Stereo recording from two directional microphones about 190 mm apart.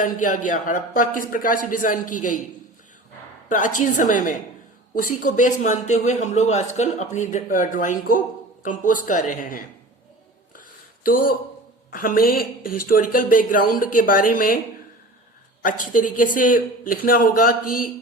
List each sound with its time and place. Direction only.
0.0 s speech: 45° left (ahead or behind)
3.5 s speech: 40° left (ahead or behind)
10.5 s a sound: 45° left (ahead or behind)
11.9 s speech: 45° left (ahead or behind)
15.6 s speech: 45° left (ahead or behind)